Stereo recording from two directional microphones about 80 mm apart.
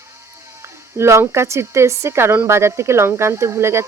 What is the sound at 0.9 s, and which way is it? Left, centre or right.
Speech, right.